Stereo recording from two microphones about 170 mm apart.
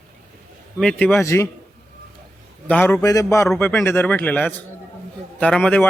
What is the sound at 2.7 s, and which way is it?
Speech, 10° left (ahead or behind).